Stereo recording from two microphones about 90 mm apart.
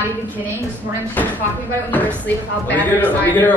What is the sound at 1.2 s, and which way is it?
Speech, 20° left (ahead or behind).